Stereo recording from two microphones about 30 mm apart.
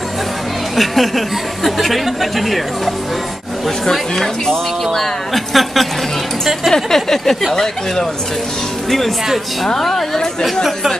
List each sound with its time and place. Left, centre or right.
0.7 s speech: centre
3.8 s speech: centre
6.7 s speech: centre
9.8 s speech: centre